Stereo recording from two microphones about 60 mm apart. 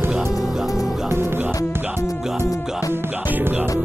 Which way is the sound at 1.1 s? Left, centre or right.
Right.